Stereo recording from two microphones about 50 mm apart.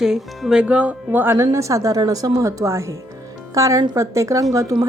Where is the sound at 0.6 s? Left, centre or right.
Right.